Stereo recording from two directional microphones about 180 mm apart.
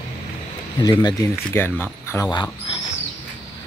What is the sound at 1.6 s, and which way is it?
Speech, 10° left (ahead or behind).